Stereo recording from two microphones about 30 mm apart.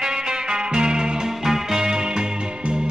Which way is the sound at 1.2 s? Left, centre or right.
Centre.